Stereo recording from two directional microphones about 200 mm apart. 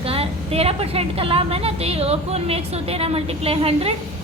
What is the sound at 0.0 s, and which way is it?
A woman's voice, 30° right (ahead or behind).